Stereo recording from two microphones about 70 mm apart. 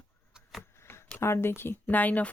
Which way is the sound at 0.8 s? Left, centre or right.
Left.